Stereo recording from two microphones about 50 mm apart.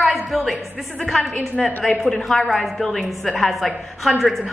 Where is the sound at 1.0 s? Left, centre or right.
Centre.